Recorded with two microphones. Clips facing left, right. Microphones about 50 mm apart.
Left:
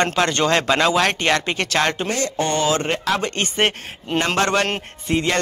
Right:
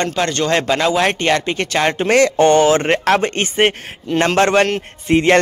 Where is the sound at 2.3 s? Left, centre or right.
Right.